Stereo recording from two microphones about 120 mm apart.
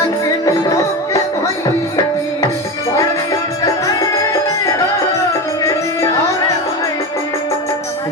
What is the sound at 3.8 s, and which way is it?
Music, 30° left (ahead or behind).